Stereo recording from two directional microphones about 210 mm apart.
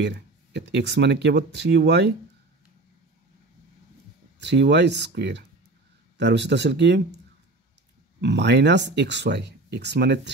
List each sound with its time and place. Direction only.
0.0 s speech: 55° right (ahead or behind)
4.4 s speech: 55° right (ahead or behind)
8.2 s speech: 55° right (ahead or behind)